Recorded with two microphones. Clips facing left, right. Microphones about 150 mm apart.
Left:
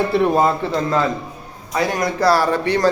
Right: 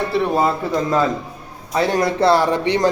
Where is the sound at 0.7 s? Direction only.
15° right (ahead or behind).